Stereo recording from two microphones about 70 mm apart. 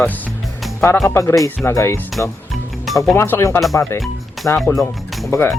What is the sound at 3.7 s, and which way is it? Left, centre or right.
Speech, left.